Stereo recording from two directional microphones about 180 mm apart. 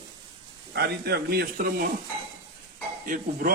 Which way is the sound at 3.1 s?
50° right (ahead or behind).